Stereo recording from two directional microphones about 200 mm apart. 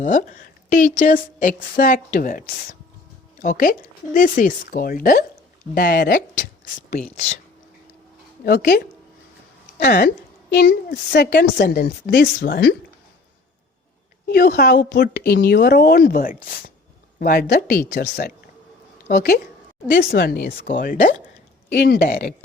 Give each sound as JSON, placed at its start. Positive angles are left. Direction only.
{"t": 0.0, "sound": "a woman's voice", "side_deg": 40}
{"t": 8.4, "sound": "speech", "side_deg": 45}
{"t": 14.3, "sound": "a woman's voice", "side_deg": 50}